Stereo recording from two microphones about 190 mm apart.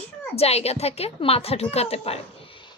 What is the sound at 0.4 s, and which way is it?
Speech, 35° left (ahead or behind).